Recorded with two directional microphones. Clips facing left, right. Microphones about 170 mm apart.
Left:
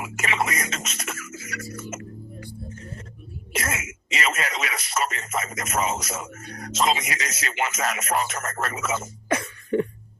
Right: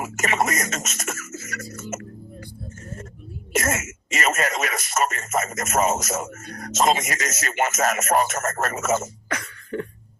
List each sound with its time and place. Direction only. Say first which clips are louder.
0.0 s speech: right 3 dB; 45° right (ahead or behind)
2.4 s music: left 1 dB; 45° right (ahead or behind)
3.5 s speech: right 6 dB; 45° right (ahead or behind)
9.3 s a sound: left 7 dB; 25° left (ahead or behind)